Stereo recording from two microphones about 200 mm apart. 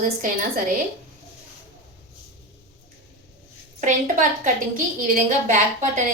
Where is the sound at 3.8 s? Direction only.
40° right (ahead or behind).